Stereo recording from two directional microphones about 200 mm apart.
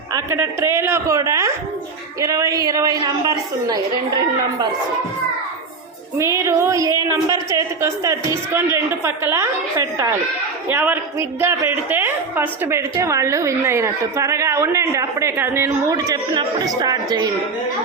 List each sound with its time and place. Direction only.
0.1 s a woman's voice: 15° right (ahead or behind)
6.1 s a woman's voice: 15° right (ahead or behind)